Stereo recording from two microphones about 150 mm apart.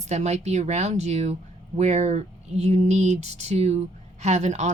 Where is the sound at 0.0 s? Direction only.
50° right (ahead or behind).